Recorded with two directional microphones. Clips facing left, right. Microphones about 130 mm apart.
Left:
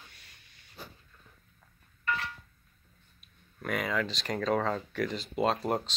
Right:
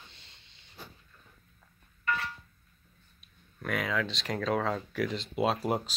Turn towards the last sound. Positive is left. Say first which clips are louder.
# even
turn(degrees=-5)  # may be behind; listen again after turning